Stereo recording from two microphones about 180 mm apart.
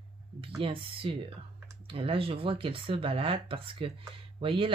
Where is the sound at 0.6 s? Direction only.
30° right (ahead or behind).